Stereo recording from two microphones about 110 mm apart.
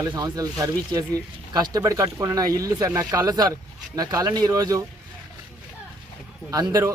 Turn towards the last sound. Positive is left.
turn(degrees=-30)  # may be behind; listen again after turning